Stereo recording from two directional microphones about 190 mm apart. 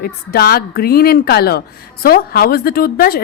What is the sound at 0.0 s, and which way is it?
A woman's voice, 55° left (ahead or behind).